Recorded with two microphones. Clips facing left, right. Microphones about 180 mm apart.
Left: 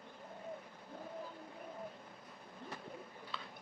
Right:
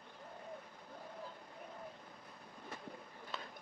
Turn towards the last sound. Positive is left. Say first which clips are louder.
# right 1 dB
turn(degrees=-45)  # may be behind; listen again after turning